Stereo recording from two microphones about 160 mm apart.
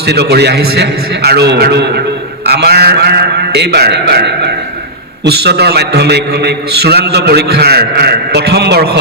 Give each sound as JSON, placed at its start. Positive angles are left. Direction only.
{"t": 0.0, "sound": "a man's voice", "side_deg": -90}